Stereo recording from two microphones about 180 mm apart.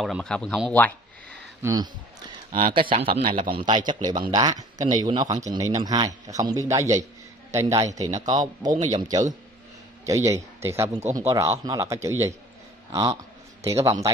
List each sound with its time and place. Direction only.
0.0 s speech: centre (ahead or behind)
1.6 s speech: 20° right (ahead or behind)
2.6 s a man's voice: 30° right (ahead or behind)
10.0 s speech: 15° right (ahead or behind)